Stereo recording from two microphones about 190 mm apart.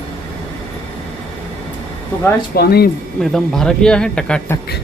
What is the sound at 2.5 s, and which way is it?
Speech, 55° left (ahead or behind).